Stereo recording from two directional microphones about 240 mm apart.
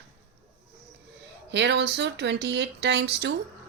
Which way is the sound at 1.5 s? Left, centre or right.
Right.